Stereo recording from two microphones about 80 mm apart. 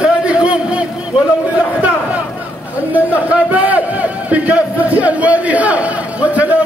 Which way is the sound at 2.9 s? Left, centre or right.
Centre.